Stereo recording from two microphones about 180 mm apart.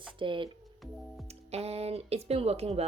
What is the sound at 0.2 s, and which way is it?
Speech, 30° right (ahead or behind).